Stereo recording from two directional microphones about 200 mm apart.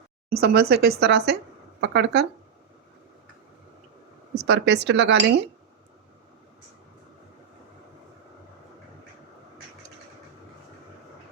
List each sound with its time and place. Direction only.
0.4 s a woman's voice: 50° right (ahead or behind)
4.4 s speech: 60° right (ahead or behind)